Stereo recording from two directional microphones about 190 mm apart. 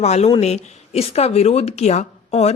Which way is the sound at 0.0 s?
35° left (ahead or behind).